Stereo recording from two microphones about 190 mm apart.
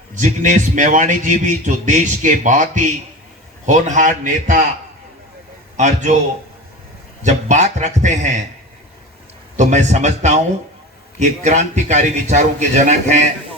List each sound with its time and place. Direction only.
0.1 s a man's voice: 40° right (ahead or behind)
5.7 s a man's voice: 40° right (ahead or behind)
7.2 s a man's voice: 40° right (ahead or behind)
9.6 s a man's voice: 40° right (ahead or behind)